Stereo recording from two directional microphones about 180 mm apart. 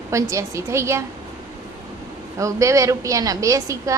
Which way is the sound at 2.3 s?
15° right (ahead or behind).